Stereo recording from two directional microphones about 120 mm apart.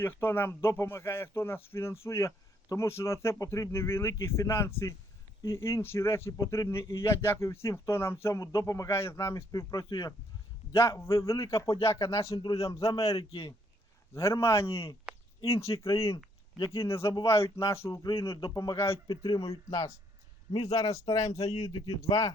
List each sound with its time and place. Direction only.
0.0 s speech: 20° left (ahead or behind)
13.1 s speech: 55° left (ahead or behind)
14.1 s speech: 25° left (ahead or behind)
15.7 s speech: 50° left (ahead or behind)
16.6 s speech: 25° left (ahead or behind)
19.0 s speech: 50° left (ahead or behind)
19.5 s speech: 25° left (ahead or behind)
20.5 s speech: 60° left (ahead or behind)
20.7 s speech: 25° left (ahead or behind)
21.4 s speech: 60° left (ahead or behind)
22.0 s speech: 25° left (ahead or behind)